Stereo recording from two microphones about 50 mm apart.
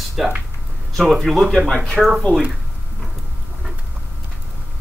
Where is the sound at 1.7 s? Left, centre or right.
Centre.